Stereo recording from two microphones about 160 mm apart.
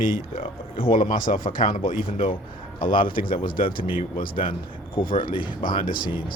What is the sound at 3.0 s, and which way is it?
Speech, 60° left (ahead or behind).